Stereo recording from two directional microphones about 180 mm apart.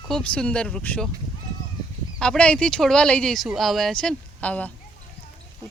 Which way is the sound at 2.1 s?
5° left (ahead or behind).